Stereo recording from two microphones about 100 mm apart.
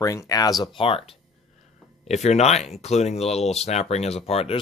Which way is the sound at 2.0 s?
90° left.